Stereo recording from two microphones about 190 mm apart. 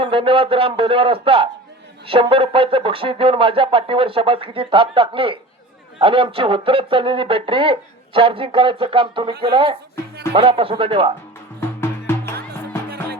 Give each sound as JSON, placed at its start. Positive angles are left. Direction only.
{"t": 0.0, "sound": "speech", "side_deg": -30}
{"t": 11.8, "sound": "music", "side_deg": 10}